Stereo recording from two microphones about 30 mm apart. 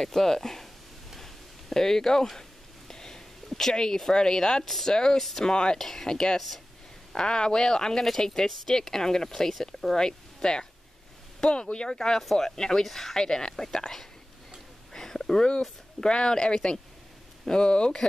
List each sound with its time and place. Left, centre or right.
0.0 s speech: centre
1.2 s a sound: centre
3.4 s speech: centre
5.8 s speech: centre
6.0 s speech: left
8.6 s speech: centre
9.9 s speech: left
12.2 s speech: centre
12.4 s speech: left
14.9 s a sound: centre
16.0 s speech: left